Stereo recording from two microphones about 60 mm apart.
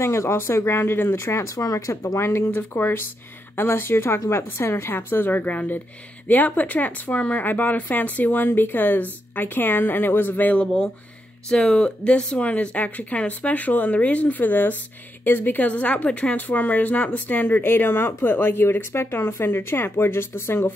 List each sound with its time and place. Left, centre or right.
0.0 s speech: left
2.1 s a woman's voice: left
11.4 s a woman's voice: centre; by 20.6 s left